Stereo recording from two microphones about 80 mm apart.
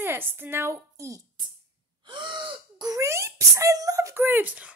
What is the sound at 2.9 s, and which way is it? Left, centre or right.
Speech, right.